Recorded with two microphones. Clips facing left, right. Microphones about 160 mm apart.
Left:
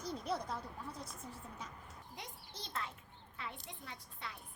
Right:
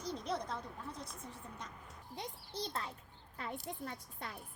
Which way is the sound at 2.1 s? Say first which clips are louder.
Right 8 dB; 30° right (ahead or behind).